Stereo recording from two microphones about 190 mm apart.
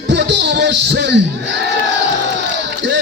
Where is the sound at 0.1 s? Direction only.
65° right (ahead or behind).